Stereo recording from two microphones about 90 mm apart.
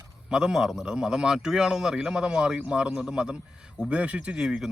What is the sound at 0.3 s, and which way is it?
Speech, 5° right (ahead or behind).